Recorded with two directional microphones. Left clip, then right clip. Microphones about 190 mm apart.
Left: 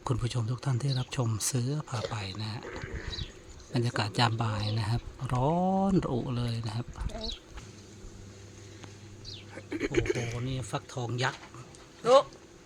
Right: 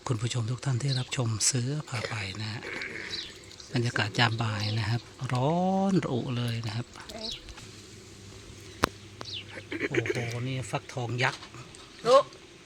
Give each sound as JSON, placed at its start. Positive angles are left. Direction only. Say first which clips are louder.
{"t": 0.0, "sound": "speech", "louder": "right 1 dB", "side_deg": -5}
{"t": 2.6, "sound": "speech", "louder": "right 5 dB", "side_deg": -35}
{"t": 3.7, "sound": "speech", "louder": "right 2 dB", "side_deg": -5}
{"t": 7.1, "sound": "speech", "louder": "right 1 dB", "side_deg": 20}
{"t": 9.6, "sound": "a sound", "louder": "even", "side_deg": -5}
{"t": 10.3, "sound": "speech", "louder": "right 2 dB", "side_deg": -10}